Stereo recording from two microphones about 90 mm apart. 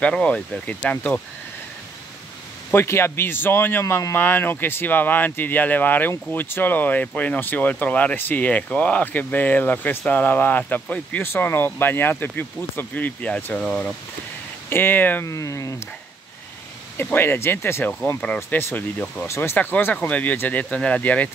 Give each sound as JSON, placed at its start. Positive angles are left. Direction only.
{"t": 0.0, "sound": "speech", "side_deg": 15}
{"t": 2.7, "sound": "speech", "side_deg": 25}
{"t": 14.7, "sound": "speech", "side_deg": 25}
{"t": 15.2, "sound": "speech", "side_deg": 35}
{"t": 16.9, "sound": "speech", "side_deg": 20}